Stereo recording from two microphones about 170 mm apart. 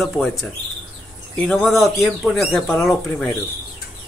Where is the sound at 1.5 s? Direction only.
Centre (ahead or behind).